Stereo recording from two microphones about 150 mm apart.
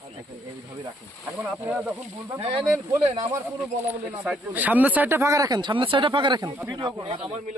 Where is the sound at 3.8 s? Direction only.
10° right (ahead or behind); by 7.2 s 30° right (ahead or behind).